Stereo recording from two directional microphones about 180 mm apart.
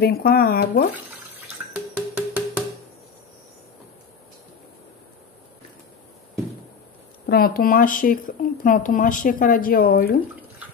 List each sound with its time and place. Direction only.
0.0 s speech: 55° left (ahead or behind)
2.0 s music: 10° right (ahead or behind)
7.2 s a woman's voice: 55° left (ahead or behind)